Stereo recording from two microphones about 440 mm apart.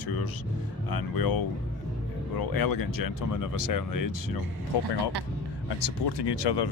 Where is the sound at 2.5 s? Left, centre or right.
Left.